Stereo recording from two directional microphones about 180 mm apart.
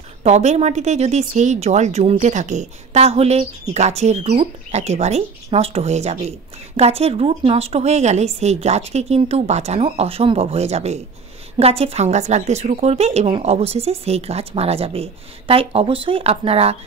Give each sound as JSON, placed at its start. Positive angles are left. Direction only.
{"t": 0.2, "sound": "speech", "side_deg": -40}